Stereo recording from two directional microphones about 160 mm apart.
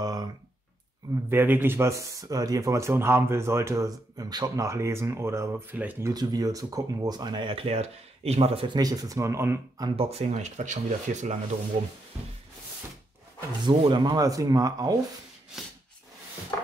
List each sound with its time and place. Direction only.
0.0 s a sound: 25° right (ahead or behind)
1.3 s speech: 10° right (ahead or behind)
6.1 s speech: 25° right (ahead or behind)
9.8 s speech: 40° right (ahead or behind)
13.6 s speech: 30° right (ahead or behind)